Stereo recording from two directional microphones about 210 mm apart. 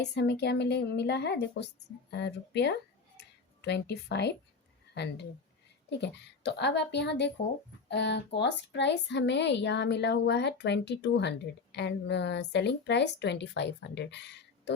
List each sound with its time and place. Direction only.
0.0 s a woman's voice: 55° left (ahead or behind)
3.2 s a sound: 55° left (ahead or behind)
6.0 s speech: 55° left (ahead or behind)